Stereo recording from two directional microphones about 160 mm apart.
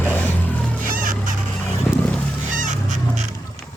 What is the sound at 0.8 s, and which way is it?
Music, 60° right (ahead or behind).